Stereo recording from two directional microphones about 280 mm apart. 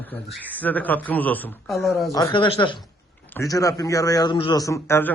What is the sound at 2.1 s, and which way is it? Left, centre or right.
A man's voice, centre.